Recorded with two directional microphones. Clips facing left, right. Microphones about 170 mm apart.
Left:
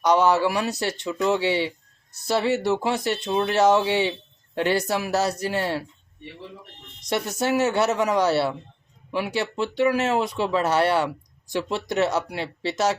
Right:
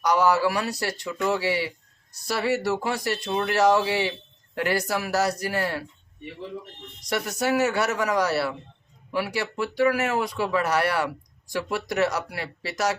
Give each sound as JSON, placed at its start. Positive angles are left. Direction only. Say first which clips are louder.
{"t": 0.0, "sound": "speech", "louder": "left 2 dB", "side_deg": 20}
{"t": 7.0, "sound": "speech", "louder": "left 1 dB", "side_deg": 25}